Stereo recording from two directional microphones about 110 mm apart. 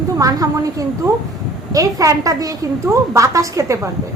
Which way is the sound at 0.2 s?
35° right (ahead or behind).